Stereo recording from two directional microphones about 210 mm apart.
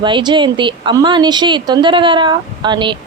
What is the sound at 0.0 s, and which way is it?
A woman's voice, 20° right (ahead or behind).